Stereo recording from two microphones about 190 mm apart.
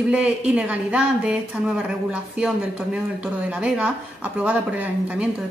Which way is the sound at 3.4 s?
5° right (ahead or behind).